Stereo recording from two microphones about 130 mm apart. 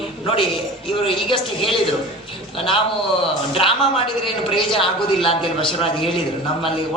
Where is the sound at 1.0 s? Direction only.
45° left (ahead or behind).